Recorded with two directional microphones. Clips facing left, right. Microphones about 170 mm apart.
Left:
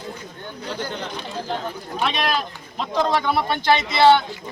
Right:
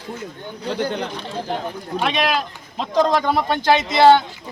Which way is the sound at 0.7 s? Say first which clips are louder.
Right 7 dB; 60° right (ahead or behind).